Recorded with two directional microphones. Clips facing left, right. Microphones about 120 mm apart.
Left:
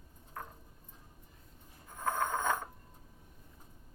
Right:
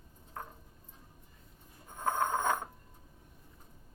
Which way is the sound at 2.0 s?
25° right (ahead or behind).